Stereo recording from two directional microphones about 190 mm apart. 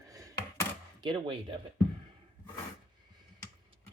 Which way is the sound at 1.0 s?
25° right (ahead or behind).